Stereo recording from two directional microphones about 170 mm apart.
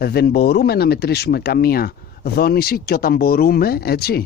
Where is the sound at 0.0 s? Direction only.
65° left (ahead or behind).